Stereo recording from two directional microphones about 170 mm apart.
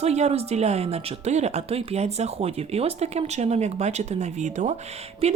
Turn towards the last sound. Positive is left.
turn(degrees=-35)  # may be behind; listen again after turning